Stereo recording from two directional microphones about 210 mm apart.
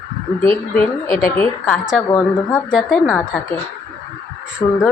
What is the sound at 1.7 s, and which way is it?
A woman's voice, centre (ahead or behind).